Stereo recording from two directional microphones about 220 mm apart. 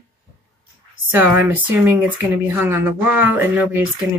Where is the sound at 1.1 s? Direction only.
10° right (ahead or behind).